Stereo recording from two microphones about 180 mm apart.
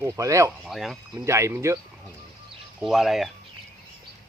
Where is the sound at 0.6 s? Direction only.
Centre (ahead or behind).